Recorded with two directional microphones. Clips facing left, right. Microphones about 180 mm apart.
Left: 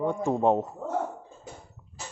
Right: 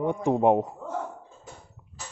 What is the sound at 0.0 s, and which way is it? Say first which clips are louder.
Speech: right 2 dB; 15° right (ahead or behind).